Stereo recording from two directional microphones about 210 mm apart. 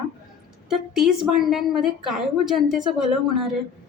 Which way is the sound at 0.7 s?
Centre (ahead or behind).